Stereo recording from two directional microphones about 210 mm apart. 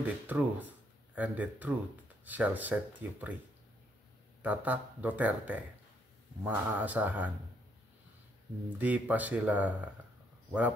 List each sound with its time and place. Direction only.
0.0 s speech: 5° right (ahead or behind)
4.4 s speech: 10° right (ahead or behind)
8.7 s speech: 5° right (ahead or behind)